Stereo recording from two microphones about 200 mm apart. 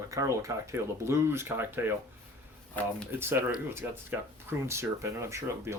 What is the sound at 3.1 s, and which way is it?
Speech, 10° right (ahead or behind).